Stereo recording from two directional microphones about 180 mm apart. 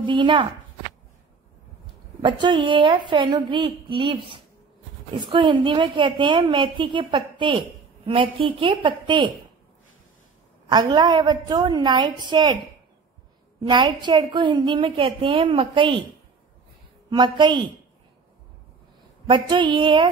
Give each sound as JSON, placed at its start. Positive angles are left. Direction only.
{"t": 0.0, "sound": "a woman's voice", "side_deg": -25}
{"t": 2.2, "sound": "a woman's voice", "side_deg": -25}
{"t": 10.7, "sound": "a woman's voice", "side_deg": -25}
{"t": 13.6, "sound": "a woman's voice", "side_deg": -25}
{"t": 17.1, "sound": "a woman's voice", "side_deg": -25}
{"t": 19.2, "sound": "a woman's voice", "side_deg": -25}